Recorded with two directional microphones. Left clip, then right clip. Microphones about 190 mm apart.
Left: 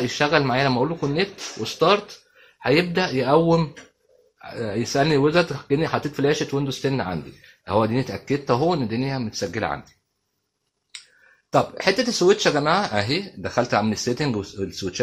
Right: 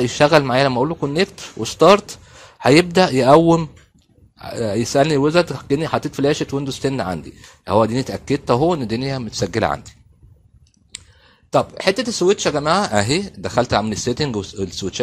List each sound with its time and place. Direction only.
0.0 s speech: 50° right (ahead or behind)
11.5 s speech: 40° right (ahead or behind)